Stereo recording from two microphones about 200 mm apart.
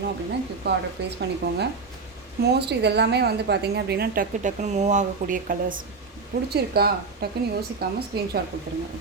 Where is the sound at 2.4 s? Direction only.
55° right (ahead or behind).